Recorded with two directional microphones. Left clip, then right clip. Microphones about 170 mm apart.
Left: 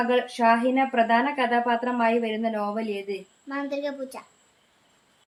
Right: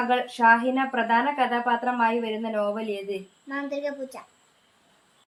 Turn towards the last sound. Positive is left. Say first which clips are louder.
# even
turn(degrees=10)  # may be behind; listen again after turning